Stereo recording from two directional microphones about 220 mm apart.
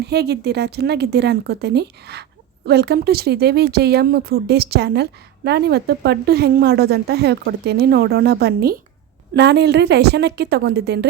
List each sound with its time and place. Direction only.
0.0 s speech: 50° right (ahead or behind)